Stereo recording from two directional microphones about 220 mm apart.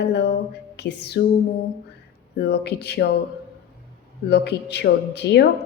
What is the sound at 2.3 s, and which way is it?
Speech, 50° left (ahead or behind).